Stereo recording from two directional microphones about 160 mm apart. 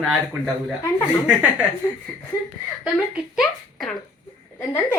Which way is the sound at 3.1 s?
5° right (ahead or behind).